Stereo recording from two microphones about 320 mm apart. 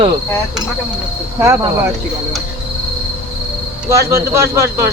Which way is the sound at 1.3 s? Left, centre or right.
Centre.